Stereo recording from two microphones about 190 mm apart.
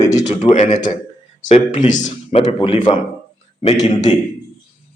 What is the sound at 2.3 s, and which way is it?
Speech, 30° left (ahead or behind).